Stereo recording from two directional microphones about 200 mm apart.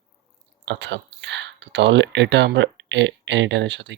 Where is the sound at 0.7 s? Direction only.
60° right (ahead or behind).